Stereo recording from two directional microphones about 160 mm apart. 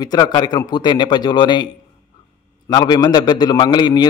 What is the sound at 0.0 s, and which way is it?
A man's voice, 25° left (ahead or behind).